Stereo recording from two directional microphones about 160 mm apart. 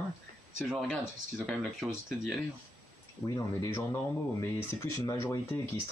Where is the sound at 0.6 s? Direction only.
Centre (ahead or behind).